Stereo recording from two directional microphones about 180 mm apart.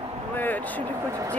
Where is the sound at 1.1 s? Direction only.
15° right (ahead or behind).